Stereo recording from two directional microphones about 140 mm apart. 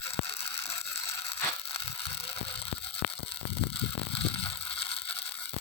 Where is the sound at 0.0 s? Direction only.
45° left (ahead or behind).